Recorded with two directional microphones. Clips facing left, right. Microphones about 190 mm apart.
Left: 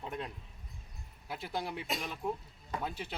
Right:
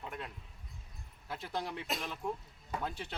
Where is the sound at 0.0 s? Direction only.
25° left (ahead or behind).